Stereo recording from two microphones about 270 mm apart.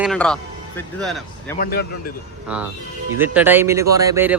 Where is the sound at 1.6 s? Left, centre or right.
Left.